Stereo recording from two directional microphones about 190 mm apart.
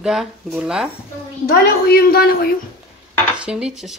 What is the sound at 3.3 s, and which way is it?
Dishes, 5° right (ahead or behind).